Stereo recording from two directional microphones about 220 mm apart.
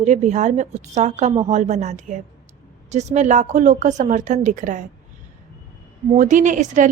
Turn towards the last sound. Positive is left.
turn(degrees=-35)  # may be behind; listen again after turning